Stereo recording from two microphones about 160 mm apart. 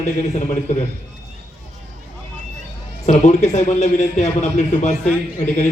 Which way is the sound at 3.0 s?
45° left (ahead or behind).